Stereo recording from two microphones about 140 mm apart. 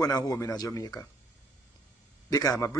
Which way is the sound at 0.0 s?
25° left (ahead or behind).